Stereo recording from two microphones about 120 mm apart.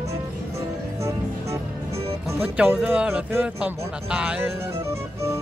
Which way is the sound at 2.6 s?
10° right (ahead or behind).